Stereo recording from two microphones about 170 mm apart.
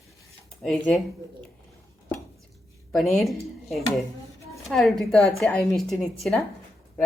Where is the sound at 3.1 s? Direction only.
Centre (ahead or behind).